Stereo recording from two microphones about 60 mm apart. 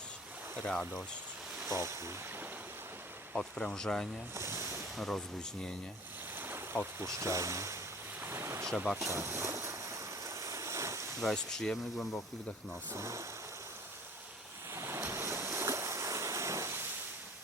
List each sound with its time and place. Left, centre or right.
0.6 s speech: centre
1.6 s speech: right
3.3 s speech: centre
4.4 s a sound: right
4.9 s speech: centre
6.3 s boat: right
7.0 s speech: right
8.2 s ocean: right
11.2 s speech: centre
13.0 s speech: right
14.7 s waves: right